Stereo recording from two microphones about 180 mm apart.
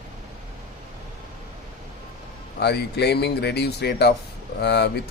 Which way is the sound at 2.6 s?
65° left (ahead or behind).